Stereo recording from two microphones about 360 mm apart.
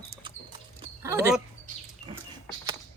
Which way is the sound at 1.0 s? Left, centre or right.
Centre.